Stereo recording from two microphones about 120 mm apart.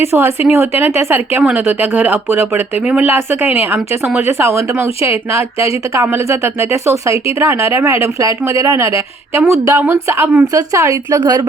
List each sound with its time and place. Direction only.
0.0 s speech: 20° right (ahead or behind)
6.8 s speech: 25° right (ahead or behind)